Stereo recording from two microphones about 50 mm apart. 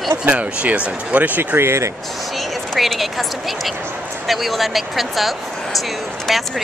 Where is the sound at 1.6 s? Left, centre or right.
Right.